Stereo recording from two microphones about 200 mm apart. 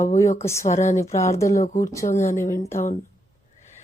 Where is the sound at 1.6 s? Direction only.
40° left (ahead or behind).